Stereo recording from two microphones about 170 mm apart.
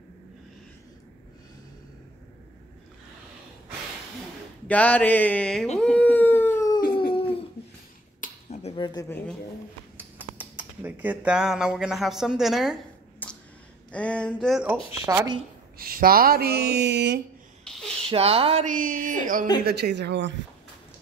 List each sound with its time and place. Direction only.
4.6 s speech: 10° left (ahead or behind)
5.8 s howl: 5° left (ahead or behind)
8.2 s finger snapping: 40° left (ahead or behind)
8.7 s speech: 25° left (ahead or behind)
9.9 s speech: 10° right (ahead or behind)
13.9 s speech: 5° left (ahead or behind)
15.0 s speech: 20° right (ahead or behind)
15.8 s speech: 60° right (ahead or behind); by 17.2 s 85° right
17.6 s a sound: centre (ahead or behind)
18.1 s speech: 35° right (ahead or behind)
18.7 s speech: 55° right (ahead or behind)
19.6 s speech: 70° right (ahead or behind); by 20.3 s 90° right